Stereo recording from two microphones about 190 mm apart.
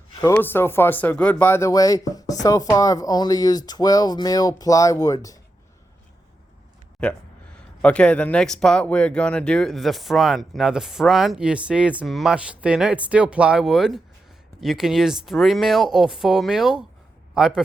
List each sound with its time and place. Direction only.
0.2 s speech: 10° left (ahead or behind)
7.0 s a man's voice: 5° left (ahead or behind)